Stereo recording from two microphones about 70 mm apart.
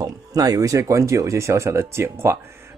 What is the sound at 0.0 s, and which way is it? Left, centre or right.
A man's voice, right.